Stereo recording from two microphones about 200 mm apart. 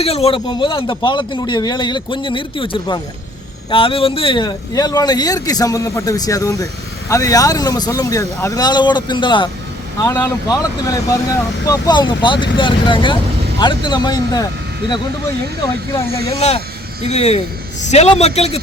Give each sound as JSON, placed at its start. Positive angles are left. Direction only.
{"t": 0.0, "sound": "a man's voice", "side_deg": 30}
{"t": 16.4, "sound": "a man's voice", "side_deg": 30}